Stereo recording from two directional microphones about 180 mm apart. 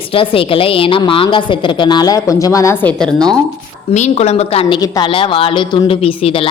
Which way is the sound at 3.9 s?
40° left (ahead or behind).